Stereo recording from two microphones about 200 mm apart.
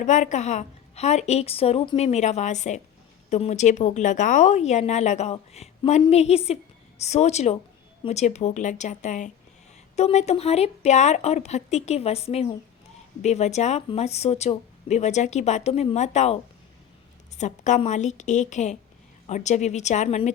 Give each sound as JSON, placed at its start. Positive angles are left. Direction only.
{"t": 0.0, "sound": "a woman's voice", "side_deg": 35}